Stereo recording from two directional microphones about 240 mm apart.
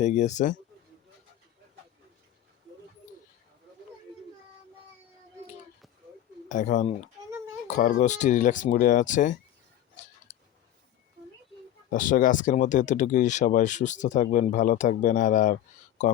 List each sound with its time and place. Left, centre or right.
0.0 s speech: left
6.5 s speech: left
11.9 s speech: left